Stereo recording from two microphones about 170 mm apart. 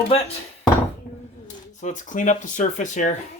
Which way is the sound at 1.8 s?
45° left (ahead or behind).